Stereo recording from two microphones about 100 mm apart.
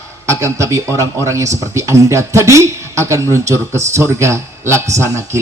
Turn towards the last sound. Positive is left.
turn(degrees=-30)  # may be behind; listen again after turning